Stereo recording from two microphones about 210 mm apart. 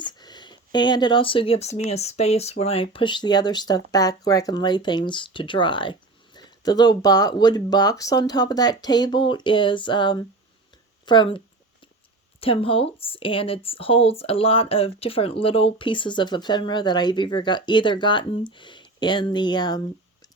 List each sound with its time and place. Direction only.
0.0 s speech: 20° left (ahead or behind)